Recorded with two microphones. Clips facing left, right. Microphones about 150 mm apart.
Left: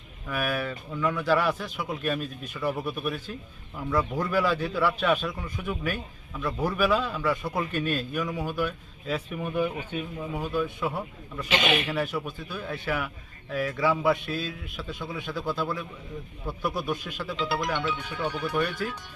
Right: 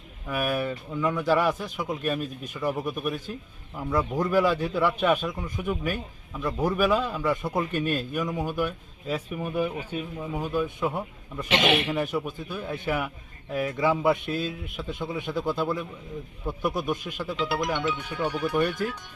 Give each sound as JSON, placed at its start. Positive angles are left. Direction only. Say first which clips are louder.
{"t": 0.3, "sound": "a man's voice", "louder": "right 2 dB", "side_deg": -10}